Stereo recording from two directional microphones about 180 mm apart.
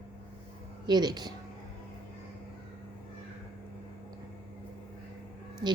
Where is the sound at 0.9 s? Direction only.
25° right (ahead or behind).